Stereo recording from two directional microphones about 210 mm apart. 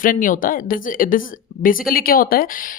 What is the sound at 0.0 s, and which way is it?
Speech, 40° left (ahead or behind).